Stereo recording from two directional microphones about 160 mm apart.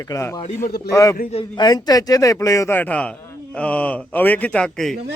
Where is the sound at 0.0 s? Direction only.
20° left (ahead or behind).